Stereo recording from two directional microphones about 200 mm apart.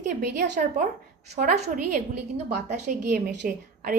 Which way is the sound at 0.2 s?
55° right (ahead or behind).